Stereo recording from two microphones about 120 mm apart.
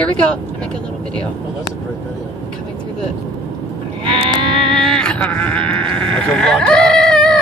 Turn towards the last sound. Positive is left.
turn(degrees=5)  # may be behind; listen again after turning